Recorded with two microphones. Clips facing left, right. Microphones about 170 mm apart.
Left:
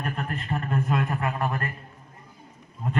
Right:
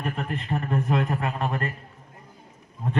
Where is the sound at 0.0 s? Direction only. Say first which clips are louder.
Right 1 dB; 20° right (ahead or behind).